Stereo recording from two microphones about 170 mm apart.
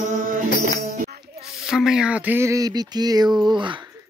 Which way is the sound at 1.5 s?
Centre (ahead or behind).